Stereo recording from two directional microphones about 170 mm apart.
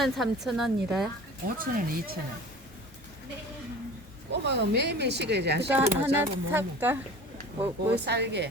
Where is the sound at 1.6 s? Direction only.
60° right (ahead or behind).